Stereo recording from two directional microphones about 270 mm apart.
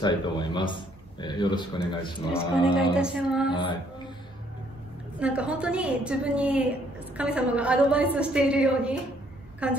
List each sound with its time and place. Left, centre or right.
0.0 s a man's voice: centre
2.7 s a woman's voice: centre
3.5 s speech: centre
5.2 s a woman's voice: centre